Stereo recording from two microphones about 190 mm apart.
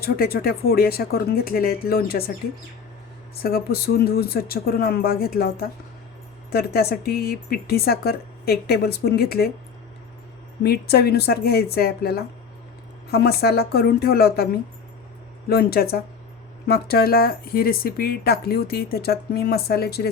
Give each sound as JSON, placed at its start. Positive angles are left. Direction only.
{"t": 0.0, "sound": "speech", "side_deg": 55}
{"t": 3.4, "sound": "speech", "side_deg": 55}
{"t": 10.6, "sound": "speech", "side_deg": 55}